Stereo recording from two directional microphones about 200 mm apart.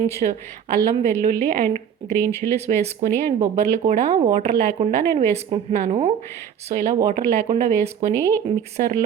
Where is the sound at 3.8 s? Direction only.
35° right (ahead or behind).